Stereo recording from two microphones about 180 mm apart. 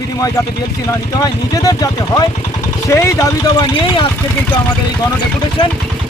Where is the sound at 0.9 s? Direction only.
20° left (ahead or behind).